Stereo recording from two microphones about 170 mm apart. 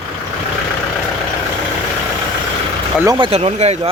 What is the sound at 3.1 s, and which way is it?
Speech, 30° right (ahead or behind).